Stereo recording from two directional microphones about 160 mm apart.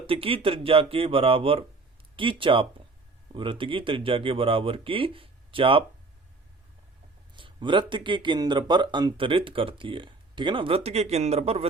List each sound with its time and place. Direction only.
0.1 s speech: 35° right (ahead or behind)
7.3 s speech: 30° right (ahead or behind)